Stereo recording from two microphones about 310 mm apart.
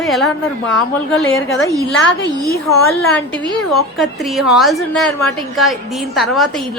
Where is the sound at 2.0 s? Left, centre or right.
Left.